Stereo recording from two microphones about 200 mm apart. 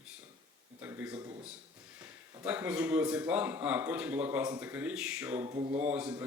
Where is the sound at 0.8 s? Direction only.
10° right (ahead or behind).